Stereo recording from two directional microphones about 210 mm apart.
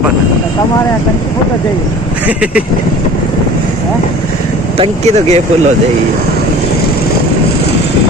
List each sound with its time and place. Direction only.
2.2 s speech: 5° right (ahead or behind)
4.7 s speech: 30° right (ahead or behind)